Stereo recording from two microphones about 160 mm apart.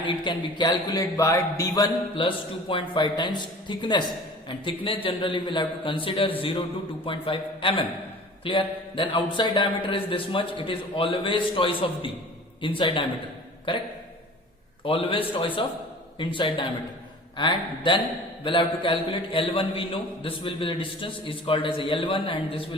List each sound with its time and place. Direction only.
0.0 s a man's voice: 30° left (ahead or behind)
14.8 s a man's voice: 35° left (ahead or behind)